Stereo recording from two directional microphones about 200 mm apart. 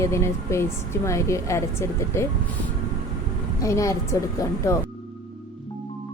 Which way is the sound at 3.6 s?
15° left (ahead or behind).